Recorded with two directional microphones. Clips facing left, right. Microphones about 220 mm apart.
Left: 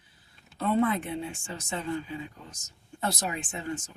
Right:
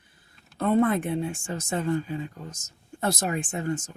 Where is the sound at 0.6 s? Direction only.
50° right (ahead or behind).